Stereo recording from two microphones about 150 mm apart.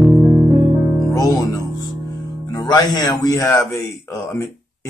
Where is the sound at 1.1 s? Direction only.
20° left (ahead or behind).